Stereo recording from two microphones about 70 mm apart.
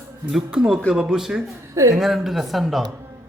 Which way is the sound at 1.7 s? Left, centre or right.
Right.